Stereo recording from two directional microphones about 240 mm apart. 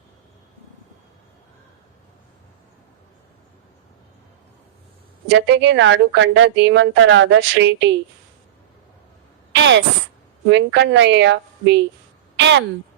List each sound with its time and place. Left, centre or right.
5.3 s speech: right
9.5 s a sound: right
10.5 s speech: right